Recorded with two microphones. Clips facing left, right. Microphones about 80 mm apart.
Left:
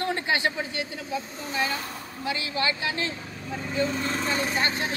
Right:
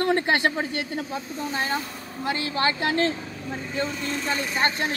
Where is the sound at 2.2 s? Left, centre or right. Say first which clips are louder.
Right 3 dB; right.